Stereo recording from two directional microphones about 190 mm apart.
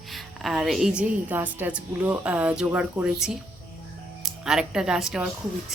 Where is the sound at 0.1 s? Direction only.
Centre (ahead or behind).